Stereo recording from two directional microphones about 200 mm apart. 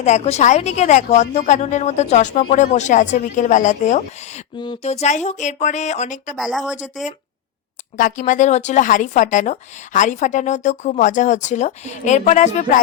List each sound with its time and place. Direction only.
0.0 s a woman's voice: 35° left (ahead or behind)
4.5 s a woman's voice: 25° left (ahead or behind)
6.3 s speech: centre (ahead or behind)
7.9 s a woman's voice: 40° left (ahead or behind)